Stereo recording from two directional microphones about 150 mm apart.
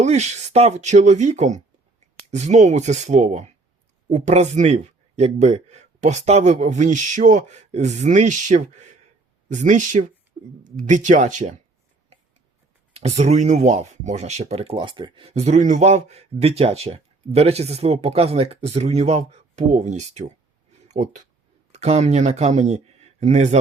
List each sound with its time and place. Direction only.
0.0 s speech: 50° right (ahead or behind)
12.9 s speech: 45° right (ahead or behind)